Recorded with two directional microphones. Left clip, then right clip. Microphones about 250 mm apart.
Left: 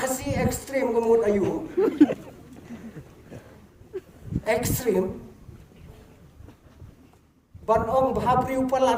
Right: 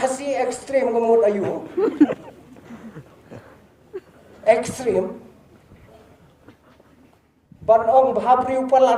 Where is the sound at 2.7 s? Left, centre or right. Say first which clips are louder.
Right 1 dB; centre.